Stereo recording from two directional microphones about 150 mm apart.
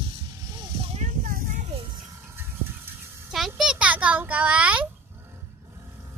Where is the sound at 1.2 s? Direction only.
65° right (ahead or behind).